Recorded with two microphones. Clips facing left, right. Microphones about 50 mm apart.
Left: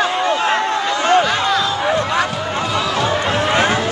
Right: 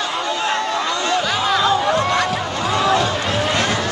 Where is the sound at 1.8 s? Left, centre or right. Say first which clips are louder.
Even; centre.